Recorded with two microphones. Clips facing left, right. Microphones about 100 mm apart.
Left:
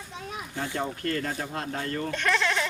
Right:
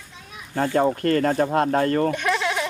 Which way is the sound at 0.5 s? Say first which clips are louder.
Right 12 dB; 65° right (ahead or behind).